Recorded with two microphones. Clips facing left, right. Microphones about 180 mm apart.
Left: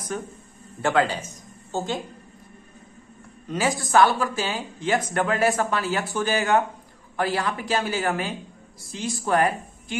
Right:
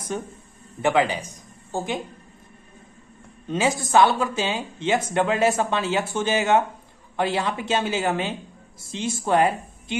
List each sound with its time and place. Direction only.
0.8 s a woman's voice: 15° right (ahead or behind)
3.4 s a woman's voice: 20° right (ahead or behind)